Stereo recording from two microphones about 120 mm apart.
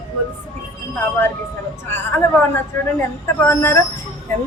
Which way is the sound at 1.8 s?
20° left (ahead or behind).